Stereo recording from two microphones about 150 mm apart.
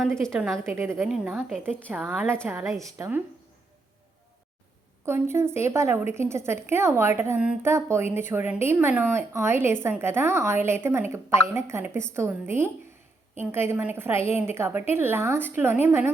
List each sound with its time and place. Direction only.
0.0 s a woman's voice: 5° left (ahead or behind)
0.6 s a woman's voice: 15° right (ahead or behind)
1.0 s a woman's voice: centre (ahead or behind)
1.9 s a woman's voice: 10° right (ahead or behind)
5.0 s a woman's voice: 15° right (ahead or behind)